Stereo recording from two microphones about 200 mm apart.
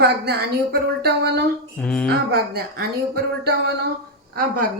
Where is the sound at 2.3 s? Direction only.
50° right (ahead or behind).